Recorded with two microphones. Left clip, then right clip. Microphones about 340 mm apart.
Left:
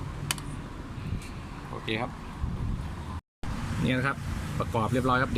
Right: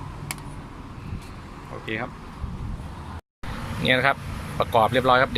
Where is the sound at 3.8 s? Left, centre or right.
Centre.